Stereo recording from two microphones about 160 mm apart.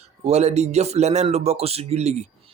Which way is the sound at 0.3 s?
45° right (ahead or behind).